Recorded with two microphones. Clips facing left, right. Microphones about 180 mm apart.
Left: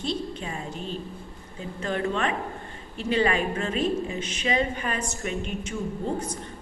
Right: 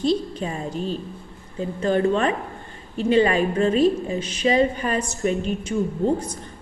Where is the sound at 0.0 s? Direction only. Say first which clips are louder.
Right 8 dB; 35° right (ahead or behind).